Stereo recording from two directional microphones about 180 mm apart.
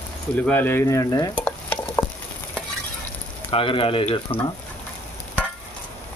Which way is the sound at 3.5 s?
30° left (ahead or behind).